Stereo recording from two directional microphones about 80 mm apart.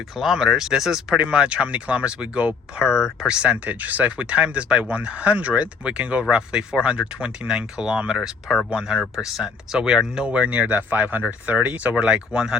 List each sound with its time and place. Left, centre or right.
0.2 s speech: centre